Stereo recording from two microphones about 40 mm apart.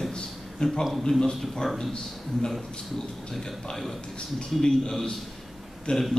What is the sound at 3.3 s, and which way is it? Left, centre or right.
A man's voice, centre.